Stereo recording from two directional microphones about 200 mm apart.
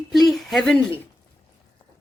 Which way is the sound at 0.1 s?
Centre (ahead or behind).